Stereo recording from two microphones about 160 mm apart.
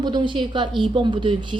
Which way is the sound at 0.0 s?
30° right (ahead or behind).